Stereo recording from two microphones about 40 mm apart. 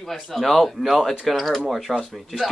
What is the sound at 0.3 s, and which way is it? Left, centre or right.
A man's voice, centre.